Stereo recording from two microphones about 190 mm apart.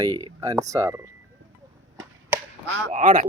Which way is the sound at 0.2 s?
20° right (ahead or behind).